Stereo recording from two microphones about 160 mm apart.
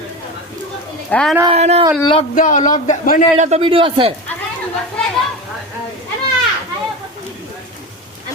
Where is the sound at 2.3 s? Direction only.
55° left (ahead or behind).